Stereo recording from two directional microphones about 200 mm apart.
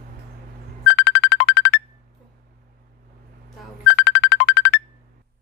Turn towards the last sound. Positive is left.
turn(degrees=60)  # may be behind; listen again after turning